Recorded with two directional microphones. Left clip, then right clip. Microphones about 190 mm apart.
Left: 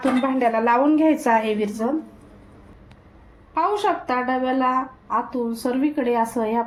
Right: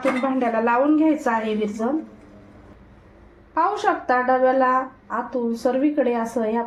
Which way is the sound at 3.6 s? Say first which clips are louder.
Even; 20° left (ahead or behind).